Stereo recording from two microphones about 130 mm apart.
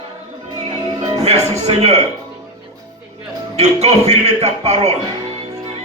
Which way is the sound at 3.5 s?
55° right (ahead or behind).